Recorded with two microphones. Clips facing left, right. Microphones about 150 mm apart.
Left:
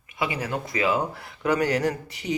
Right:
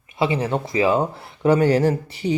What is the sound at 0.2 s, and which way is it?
Speech, 25° right (ahead or behind).